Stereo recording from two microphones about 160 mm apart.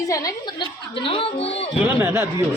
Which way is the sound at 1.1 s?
35° left (ahead or behind).